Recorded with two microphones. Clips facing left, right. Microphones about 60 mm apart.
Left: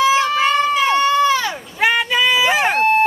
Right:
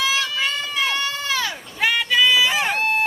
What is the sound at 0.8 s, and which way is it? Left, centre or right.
Goat, left.